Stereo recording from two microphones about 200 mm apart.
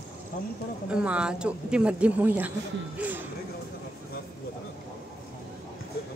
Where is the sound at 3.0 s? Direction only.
10° right (ahead or behind).